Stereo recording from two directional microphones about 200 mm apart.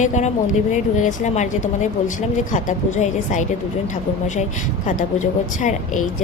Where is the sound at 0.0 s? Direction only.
35° left (ahead or behind).